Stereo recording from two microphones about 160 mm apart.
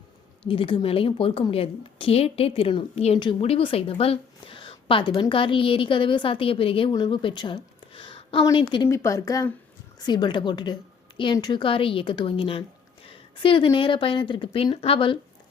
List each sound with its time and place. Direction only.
0.4 s a woman's voice: 35° left (ahead or behind)
8.9 s a woman's voice: 20° left (ahead or behind); by 15.2 s 35° left (ahead or behind)